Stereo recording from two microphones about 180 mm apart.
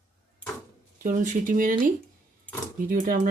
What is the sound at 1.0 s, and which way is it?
Speech, 45° right (ahead or behind).